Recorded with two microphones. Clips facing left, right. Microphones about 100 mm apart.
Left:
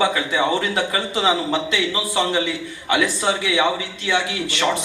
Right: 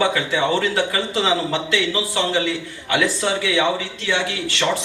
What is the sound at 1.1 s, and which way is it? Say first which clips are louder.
Speech: even; 20° left (ahead or behind).